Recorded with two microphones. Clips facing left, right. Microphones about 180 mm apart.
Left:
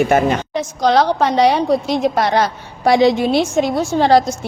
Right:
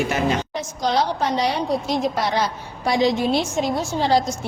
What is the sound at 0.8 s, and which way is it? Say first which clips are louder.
Speech: left 7 dB; 75° left (ahead or behind).